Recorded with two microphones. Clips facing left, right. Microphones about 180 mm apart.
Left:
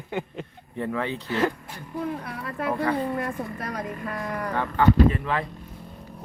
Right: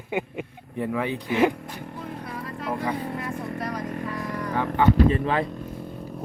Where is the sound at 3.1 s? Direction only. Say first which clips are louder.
Left 1 dB; 55° left (ahead or behind).